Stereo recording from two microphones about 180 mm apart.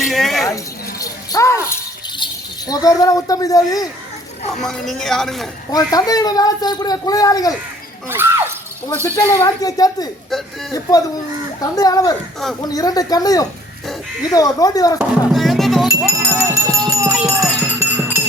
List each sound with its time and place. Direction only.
0.0 s a sound: centre (ahead or behind)
0.4 s speech: 20° left (ahead or behind)
4.6 s speech: centre (ahead or behind)
5.7 s a man's voice: 20° left (ahead or behind)
8.1 s speech: 15° right (ahead or behind)
9.1 s a man's voice: 20° left (ahead or behind)
10.2 s speech: centre (ahead or behind)
11.6 s a man's voice: 20° left (ahead or behind)
15.3 s music: centre (ahead or behind)
16.0 s music: 15° right (ahead or behind)